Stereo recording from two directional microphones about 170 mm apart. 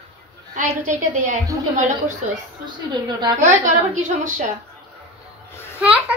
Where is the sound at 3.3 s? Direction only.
45° right (ahead or behind).